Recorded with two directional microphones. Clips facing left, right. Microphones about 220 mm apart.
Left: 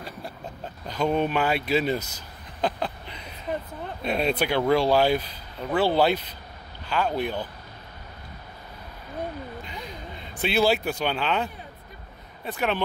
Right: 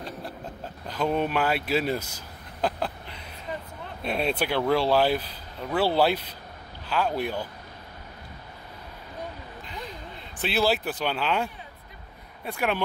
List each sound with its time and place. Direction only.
0.8 s speech: 5° right (ahead or behind)
10.4 s speech: centre (ahead or behind)